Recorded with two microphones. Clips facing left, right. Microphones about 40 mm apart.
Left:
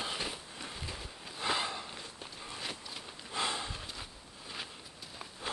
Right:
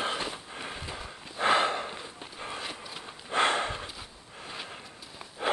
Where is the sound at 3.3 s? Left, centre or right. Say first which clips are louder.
Right 10 dB; right.